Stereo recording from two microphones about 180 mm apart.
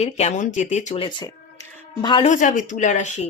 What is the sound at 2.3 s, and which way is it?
Speech, 45° left (ahead or behind).